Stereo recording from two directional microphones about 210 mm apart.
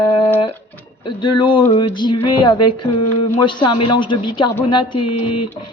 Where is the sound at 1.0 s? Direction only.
20° left (ahead or behind).